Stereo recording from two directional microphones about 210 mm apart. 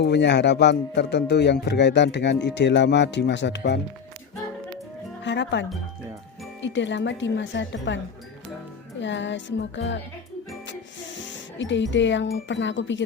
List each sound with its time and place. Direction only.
0.0 s a man's voice: 55° left (ahead or behind)
5.2 s music: 55° left (ahead or behind)
6.6 s a man's voice: 60° left (ahead or behind)
11.3 s a man's voice: 60° left (ahead or behind)